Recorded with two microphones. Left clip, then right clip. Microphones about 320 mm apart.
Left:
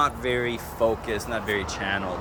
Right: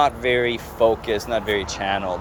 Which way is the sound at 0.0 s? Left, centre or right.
Centre.